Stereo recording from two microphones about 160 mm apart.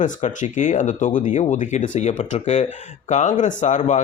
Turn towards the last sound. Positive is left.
turn(degrees=50)  # may be behind; listen again after turning